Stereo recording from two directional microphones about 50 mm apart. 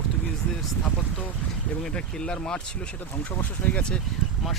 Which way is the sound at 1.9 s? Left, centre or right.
Centre.